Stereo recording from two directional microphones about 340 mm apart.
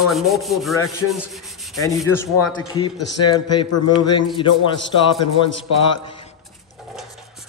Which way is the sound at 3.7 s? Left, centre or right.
Left.